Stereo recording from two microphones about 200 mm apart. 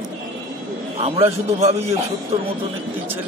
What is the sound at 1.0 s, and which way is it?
Speech, 30° right (ahead or behind).